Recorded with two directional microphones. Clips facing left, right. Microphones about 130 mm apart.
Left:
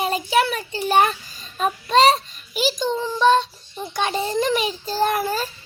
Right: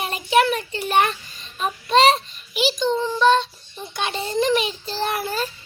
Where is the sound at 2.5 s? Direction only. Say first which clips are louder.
Right 1 dB; 40° left (ahead or behind).